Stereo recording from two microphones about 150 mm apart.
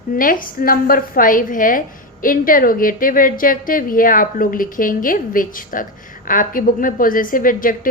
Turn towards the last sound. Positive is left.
turn(degrees=65)  # may be behind; listen again after turning